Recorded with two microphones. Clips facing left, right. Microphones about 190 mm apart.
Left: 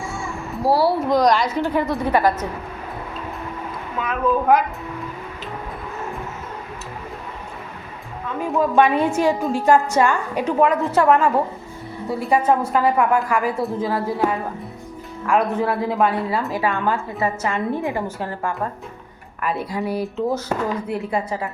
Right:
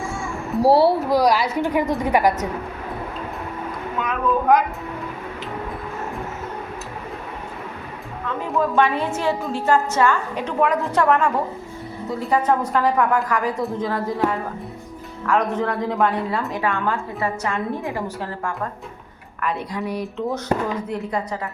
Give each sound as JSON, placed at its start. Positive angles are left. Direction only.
{"t": 0.6, "sound": "a woman's voice", "side_deg": -30}
{"t": 1.0, "sound": "a woman's voice", "side_deg": -5}
{"t": 4.0, "sound": "a woman's voice", "side_deg": 5}
{"t": 8.4, "sound": "a woman's voice", "side_deg": 10}
{"t": 10.6, "sound": "a woman's voice", "side_deg": 0}
{"t": 12.5, "sound": "a woman's voice", "side_deg": 10}
{"t": 19.5, "sound": "a woman's voice", "side_deg": 5}